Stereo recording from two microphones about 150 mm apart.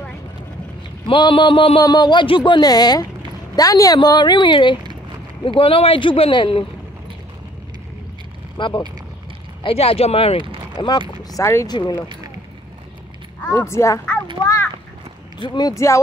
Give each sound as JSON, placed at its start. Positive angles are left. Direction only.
{"t": 1.0, "sound": "a woman's voice", "side_deg": 35}
{"t": 8.5, "sound": "speech", "side_deg": 35}
{"t": 10.8, "sound": "a woman's voice", "side_deg": 30}
{"t": 11.7, "sound": "speech", "side_deg": 30}
{"t": 13.4, "sound": "a woman's voice", "side_deg": 15}
{"t": 15.4, "sound": "a woman's voice", "side_deg": 30}